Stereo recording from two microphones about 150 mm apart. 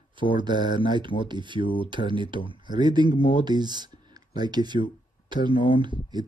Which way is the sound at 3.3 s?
30° right (ahead or behind).